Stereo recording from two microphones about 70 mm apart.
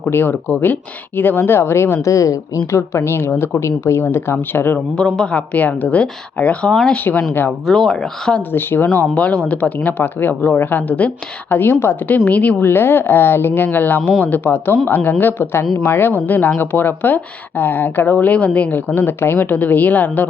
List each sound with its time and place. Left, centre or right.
0.1 s speech: left
4.9 s a woman's voice: centre
8.5 s speech: left
9.1 s a woman's voice: centre